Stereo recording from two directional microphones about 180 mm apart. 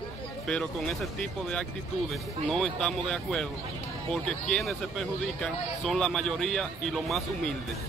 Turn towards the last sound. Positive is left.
turn(degrees=0)  # may be behind; listen again after turning